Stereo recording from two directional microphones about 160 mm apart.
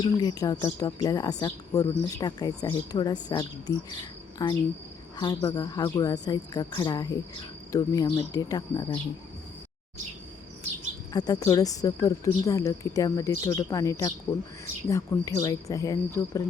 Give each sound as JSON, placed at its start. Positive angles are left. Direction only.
{"t": 0.0, "sound": "a woman's voice", "side_deg": 25}
{"t": 11.1, "sound": "a woman's voice", "side_deg": 25}